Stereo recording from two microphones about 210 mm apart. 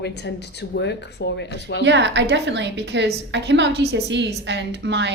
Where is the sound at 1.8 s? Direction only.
55° right (ahead or behind).